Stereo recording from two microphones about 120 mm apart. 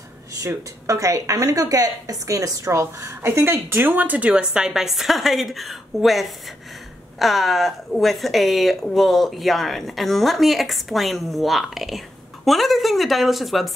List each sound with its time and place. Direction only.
0.4 s a woman's voice: 25° right (ahead or behind); by 13.7 s centre (ahead or behind)